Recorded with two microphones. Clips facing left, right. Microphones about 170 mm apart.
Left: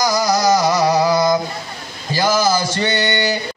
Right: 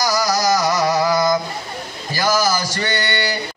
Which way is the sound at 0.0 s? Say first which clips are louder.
Left 2 dB; 20° left (ahead or behind).